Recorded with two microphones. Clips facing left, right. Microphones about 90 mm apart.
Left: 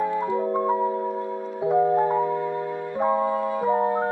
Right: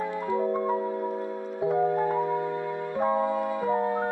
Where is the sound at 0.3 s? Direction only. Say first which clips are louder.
Left 3 dB; 20° left (ahead or behind).